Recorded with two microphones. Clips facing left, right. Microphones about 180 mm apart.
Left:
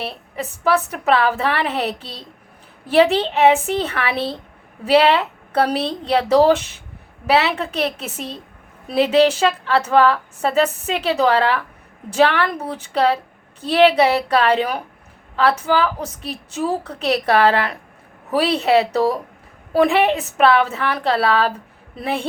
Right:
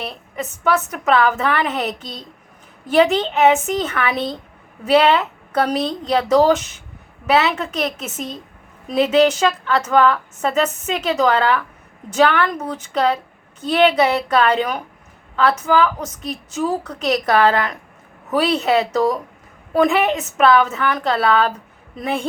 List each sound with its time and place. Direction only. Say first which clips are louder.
0.0 s speech: even; 35° left (ahead or behind)